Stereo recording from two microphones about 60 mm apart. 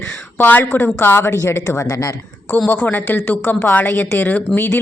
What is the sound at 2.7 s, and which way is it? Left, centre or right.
A woman's voice, left.